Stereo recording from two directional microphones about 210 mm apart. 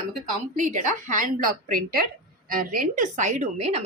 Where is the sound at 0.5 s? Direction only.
35° right (ahead or behind).